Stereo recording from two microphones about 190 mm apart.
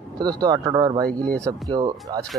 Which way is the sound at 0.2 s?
20° right (ahead or behind).